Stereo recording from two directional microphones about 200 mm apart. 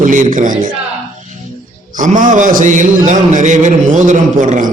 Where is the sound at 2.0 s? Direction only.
40° right (ahead or behind).